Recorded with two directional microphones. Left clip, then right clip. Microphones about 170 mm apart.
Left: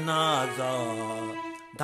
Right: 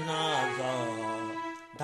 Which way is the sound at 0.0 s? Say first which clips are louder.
Left 4 dB; 50° left (ahead or behind).